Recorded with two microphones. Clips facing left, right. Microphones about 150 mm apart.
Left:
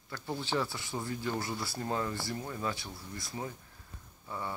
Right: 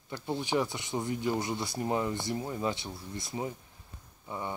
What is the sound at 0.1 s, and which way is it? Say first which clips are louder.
Speech: right 4 dB; 15° right (ahead or behind).